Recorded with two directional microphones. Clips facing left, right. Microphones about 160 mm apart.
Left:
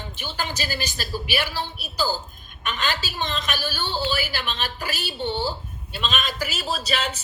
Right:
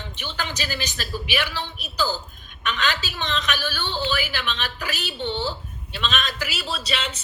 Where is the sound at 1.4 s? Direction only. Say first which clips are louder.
Left 1 dB; 10° left (ahead or behind).